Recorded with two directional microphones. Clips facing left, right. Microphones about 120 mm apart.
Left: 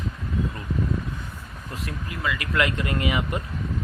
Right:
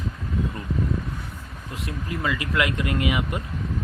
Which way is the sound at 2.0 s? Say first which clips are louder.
Right 3 dB; 30° right (ahead or behind).